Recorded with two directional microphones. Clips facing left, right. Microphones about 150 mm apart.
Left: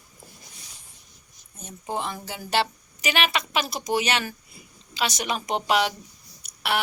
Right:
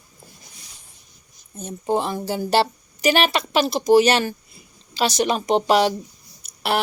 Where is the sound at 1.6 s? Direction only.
30° right (ahead or behind).